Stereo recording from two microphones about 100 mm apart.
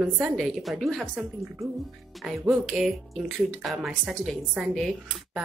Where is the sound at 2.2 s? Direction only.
10° right (ahead or behind).